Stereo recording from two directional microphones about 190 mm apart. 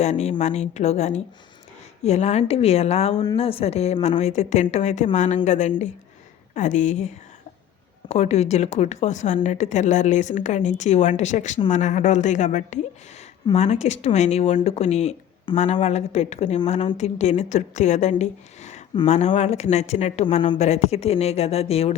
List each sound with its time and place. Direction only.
0.0 s speech: 35° left (ahead or behind)